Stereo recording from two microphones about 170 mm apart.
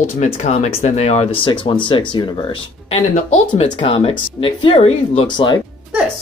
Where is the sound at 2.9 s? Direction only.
40° left (ahead or behind).